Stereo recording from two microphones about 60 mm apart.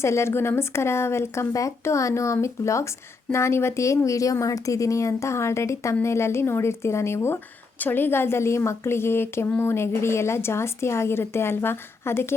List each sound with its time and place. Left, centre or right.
0.0 s a woman's voice: left
1.5 s a woman's voice: left
7.8 s a woman's voice: left